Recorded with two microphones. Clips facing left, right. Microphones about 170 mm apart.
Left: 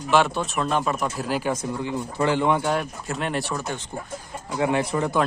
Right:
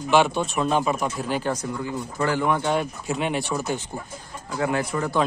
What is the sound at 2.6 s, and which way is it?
Speech, centre (ahead or behind).